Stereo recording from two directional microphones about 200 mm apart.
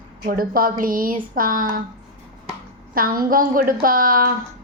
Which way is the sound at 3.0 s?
45° right (ahead or behind).